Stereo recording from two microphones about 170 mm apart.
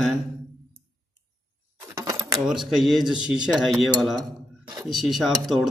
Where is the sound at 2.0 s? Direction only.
20° right (ahead or behind).